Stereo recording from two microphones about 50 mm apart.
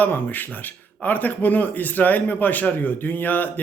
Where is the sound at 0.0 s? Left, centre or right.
Left.